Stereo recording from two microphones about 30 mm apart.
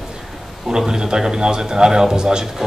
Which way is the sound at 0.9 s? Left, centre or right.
Right.